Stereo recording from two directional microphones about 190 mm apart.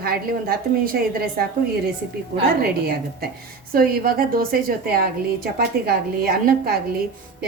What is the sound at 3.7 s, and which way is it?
A woman's voice, 50° right (ahead or behind).